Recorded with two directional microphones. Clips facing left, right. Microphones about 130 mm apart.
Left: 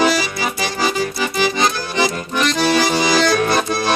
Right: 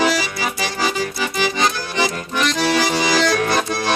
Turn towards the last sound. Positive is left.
turn(degrees=35)  # may be behind; listen again after turning